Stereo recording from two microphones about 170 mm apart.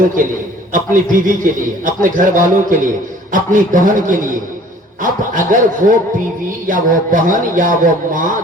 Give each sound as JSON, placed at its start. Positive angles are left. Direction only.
{"t": 0.7, "sound": "a man's voice", "side_deg": -50}